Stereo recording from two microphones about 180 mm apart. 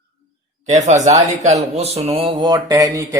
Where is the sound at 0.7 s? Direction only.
40° right (ahead or behind).